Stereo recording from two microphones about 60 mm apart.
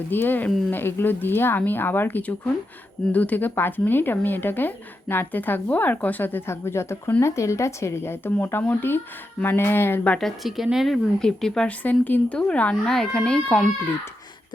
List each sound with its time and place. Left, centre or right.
0.1 s speech: left
6.5 s speech: left
10.2 s a woman's voice: centre
11.8 s speech: left
12.4 s speech: centre
12.9 s speech: centre